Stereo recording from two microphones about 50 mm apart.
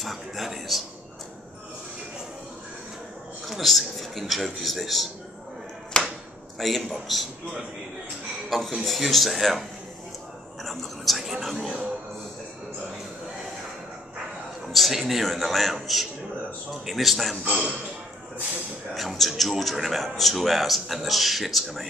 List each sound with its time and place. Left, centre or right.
0.0 s speech: centre
3.4 s speech: centre
5.9 s a sound: centre
6.6 s speech: centre
8.5 s speech: centre
14.7 s a man's voice: centre
18.9 s speech: centre